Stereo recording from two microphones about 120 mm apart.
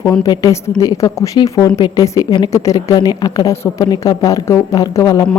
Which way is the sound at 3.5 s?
25° left (ahead or behind).